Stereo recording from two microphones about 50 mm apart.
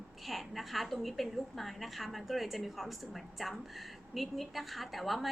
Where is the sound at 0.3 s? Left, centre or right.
Centre.